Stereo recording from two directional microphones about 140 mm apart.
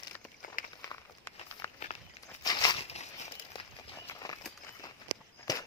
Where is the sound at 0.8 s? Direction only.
20° left (ahead or behind).